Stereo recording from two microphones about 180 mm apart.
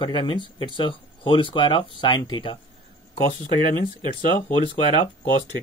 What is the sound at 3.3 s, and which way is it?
Speech, 50° left (ahead or behind).